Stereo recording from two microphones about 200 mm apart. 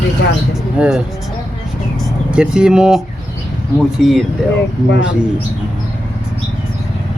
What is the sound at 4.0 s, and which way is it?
Speech, centre (ahead or behind).